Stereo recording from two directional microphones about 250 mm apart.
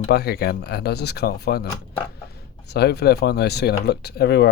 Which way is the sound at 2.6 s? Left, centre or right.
Left.